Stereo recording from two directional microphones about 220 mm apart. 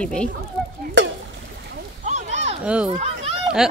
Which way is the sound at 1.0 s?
55° right (ahead or behind).